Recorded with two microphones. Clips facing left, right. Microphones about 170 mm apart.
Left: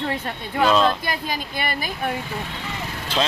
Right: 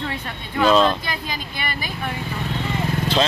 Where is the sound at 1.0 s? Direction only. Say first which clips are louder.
Left 2 dB; 50° left (ahead or behind).